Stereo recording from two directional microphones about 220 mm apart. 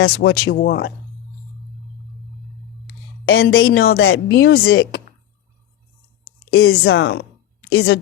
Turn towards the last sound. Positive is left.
turn(degrees=60)  # may be behind; listen again after turning